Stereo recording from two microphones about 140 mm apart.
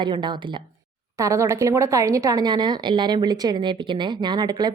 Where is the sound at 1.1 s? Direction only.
20° right (ahead or behind).